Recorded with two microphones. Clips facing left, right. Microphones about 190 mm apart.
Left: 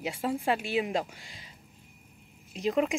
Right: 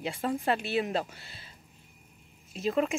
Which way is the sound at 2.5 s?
15° left (ahead or behind).